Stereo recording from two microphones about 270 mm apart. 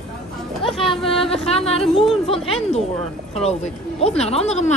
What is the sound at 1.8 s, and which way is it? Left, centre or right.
Speech, centre.